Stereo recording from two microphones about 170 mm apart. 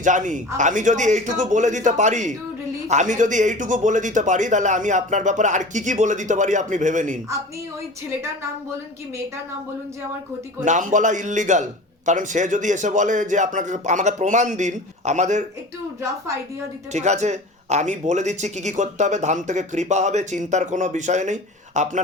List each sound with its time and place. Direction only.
0.0 s speech: 50° right (ahead or behind)
10.6 s speech: 50° right (ahead or behind)
16.0 s a woman's voice: 15° right (ahead or behind)
16.9 s speech: 40° right (ahead or behind)